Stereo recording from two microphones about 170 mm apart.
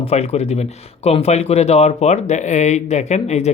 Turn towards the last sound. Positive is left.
turn(degrees=40)  # may be behind; listen again after turning